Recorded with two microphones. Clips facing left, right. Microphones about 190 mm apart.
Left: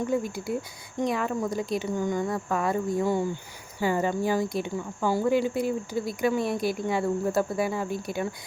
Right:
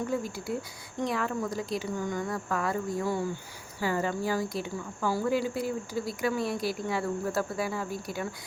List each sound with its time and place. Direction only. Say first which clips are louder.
1.0 s speech: left 3 dB; 20° left (ahead or behind)